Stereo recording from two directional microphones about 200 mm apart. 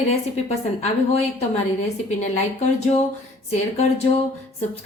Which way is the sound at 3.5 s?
30° left (ahead or behind).